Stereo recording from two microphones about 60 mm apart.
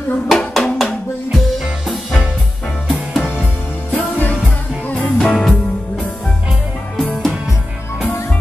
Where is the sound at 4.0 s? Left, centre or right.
Left.